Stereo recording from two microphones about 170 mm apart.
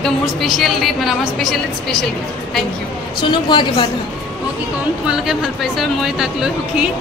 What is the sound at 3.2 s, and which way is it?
Speech, 30° left (ahead or behind).